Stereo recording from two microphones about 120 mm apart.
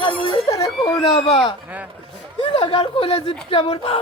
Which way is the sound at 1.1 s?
50° left (ahead or behind).